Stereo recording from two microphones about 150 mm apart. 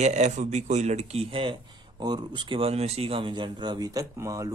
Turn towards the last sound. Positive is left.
turn(degrees=-20)  # may be behind; listen again after turning